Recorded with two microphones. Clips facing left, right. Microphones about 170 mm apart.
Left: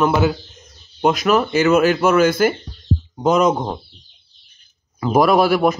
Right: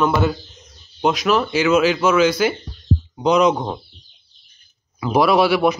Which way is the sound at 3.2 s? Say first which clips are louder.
Even; centre (ahead or behind).